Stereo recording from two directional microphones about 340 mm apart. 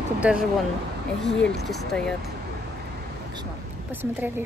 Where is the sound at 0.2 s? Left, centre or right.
Centre.